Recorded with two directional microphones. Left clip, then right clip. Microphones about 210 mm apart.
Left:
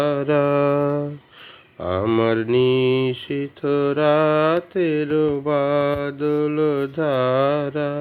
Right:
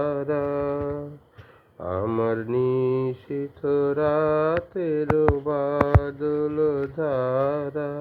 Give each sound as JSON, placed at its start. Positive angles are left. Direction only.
{"t": 0.2, "sound": "music", "side_deg": 35}
{"t": 2.0, "sound": "mantra", "side_deg": 25}